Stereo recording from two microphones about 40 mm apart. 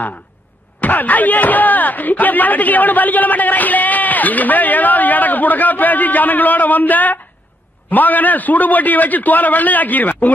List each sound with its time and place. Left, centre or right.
0.7 s speech: left